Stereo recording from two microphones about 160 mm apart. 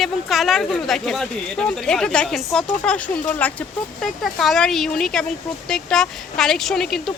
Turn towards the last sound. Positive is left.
turn(degrees=0)  # may be behind; listen again after turning